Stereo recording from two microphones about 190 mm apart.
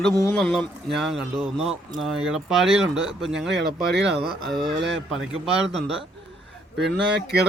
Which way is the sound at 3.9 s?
60° right (ahead or behind).